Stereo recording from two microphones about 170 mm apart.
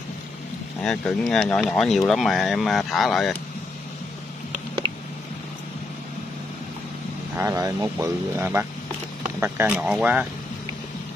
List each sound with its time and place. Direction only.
0.8 s speech: 5° left (ahead or behind)
4.8 s a sound: 30° right (ahead or behind)
7.3 s speech: 20° right (ahead or behind)